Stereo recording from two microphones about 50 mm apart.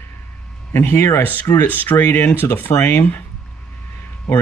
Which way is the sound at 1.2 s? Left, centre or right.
Left.